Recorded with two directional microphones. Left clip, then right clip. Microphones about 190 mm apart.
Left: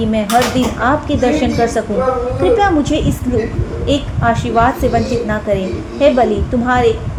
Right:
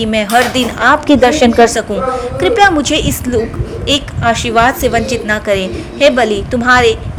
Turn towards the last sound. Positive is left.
turn(degrees=-40)  # may be behind; listen again after turning